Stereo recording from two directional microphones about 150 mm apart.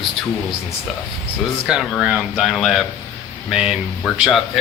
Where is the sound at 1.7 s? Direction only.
5° right (ahead or behind).